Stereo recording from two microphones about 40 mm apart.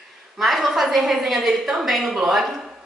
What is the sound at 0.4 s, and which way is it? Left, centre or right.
A woman's voice, centre.